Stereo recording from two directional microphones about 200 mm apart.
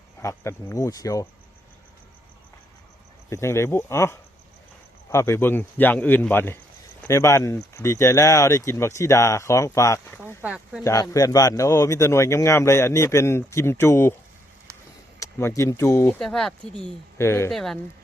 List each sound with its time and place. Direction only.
0.2 s a man's voice: 15° left (ahead or behind)
3.2 s a man's voice: 15° left (ahead or behind)
10.4 s speech: 5° right (ahead or behind)
10.8 s a man's voice: 15° left (ahead or behind)
15.2 s a man's voice: 15° left (ahead or behind)
16.2 s speech: centre (ahead or behind)
17.5 s speech: centre (ahead or behind)